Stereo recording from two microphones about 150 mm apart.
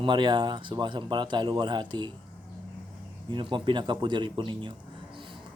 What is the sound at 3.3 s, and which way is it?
A man's voice, 35° right (ahead or behind).